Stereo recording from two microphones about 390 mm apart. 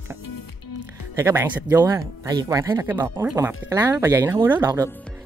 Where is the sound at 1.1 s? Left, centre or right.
Centre.